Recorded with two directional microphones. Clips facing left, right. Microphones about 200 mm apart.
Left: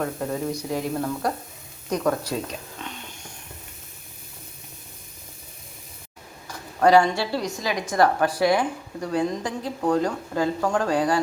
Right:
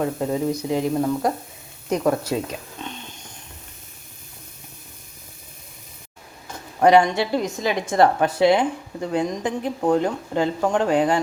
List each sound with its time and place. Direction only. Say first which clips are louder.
0.0 s a woman's voice: right 4 dB; 20° right (ahead or behind)
6.5 s a woman's voice: right 2 dB; 20° right (ahead or behind)